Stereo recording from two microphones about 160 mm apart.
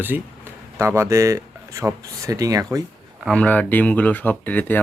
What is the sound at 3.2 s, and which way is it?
Speech, 5° left (ahead or behind).